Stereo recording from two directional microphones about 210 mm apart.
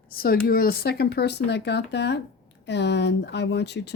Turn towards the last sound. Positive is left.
turn(degrees=55)  # may be behind; listen again after turning